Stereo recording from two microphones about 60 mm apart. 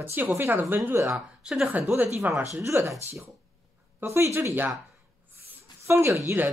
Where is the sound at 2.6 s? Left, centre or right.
Right.